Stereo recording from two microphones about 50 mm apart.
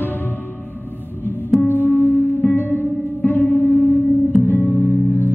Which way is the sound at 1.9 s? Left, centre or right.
Left.